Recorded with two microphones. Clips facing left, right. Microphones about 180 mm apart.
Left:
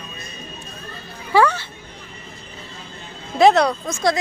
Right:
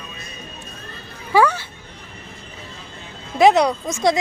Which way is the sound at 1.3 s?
10° right (ahead or behind).